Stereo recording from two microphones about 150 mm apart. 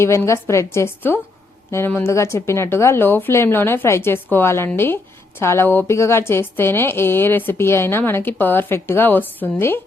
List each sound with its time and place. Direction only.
0.0 s a woman's voice: 20° left (ahead or behind)